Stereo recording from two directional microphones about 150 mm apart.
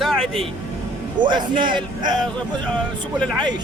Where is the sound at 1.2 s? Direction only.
30° right (ahead or behind).